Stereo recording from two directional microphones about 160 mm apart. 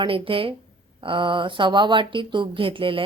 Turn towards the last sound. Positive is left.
turn(degrees=-35)  # may be behind; listen again after turning